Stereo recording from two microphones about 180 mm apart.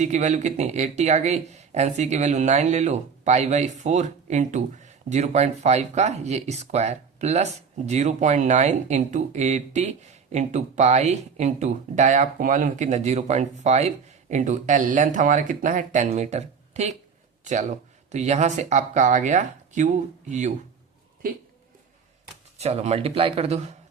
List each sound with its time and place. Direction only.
0.0 s speech: 40° right (ahead or behind)
22.5 s speech: 35° right (ahead or behind)